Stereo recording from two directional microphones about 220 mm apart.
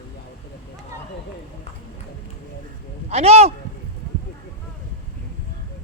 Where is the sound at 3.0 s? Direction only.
30° right (ahead or behind).